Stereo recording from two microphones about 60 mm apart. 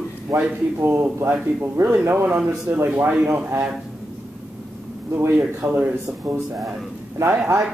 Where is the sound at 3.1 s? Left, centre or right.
Centre.